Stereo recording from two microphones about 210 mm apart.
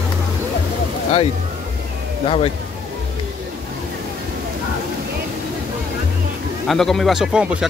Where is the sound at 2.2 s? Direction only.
25° left (ahead or behind).